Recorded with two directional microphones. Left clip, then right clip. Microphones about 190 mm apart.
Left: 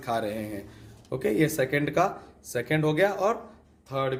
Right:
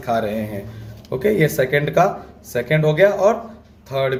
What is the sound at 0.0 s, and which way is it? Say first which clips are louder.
Speech: right 8 dB; 25° left (ahead or behind).